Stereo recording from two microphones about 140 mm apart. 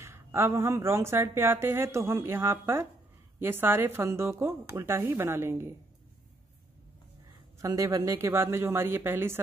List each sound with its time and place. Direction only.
0.0 s speech: 20° right (ahead or behind)
7.6 s speech: 20° right (ahead or behind)